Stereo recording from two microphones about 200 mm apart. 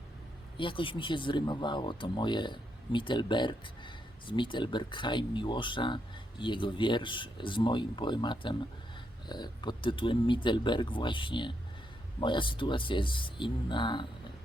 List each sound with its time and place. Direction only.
0.5 s speech: 25° left (ahead or behind)